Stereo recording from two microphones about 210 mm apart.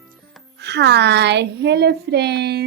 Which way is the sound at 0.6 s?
55° right (ahead or behind).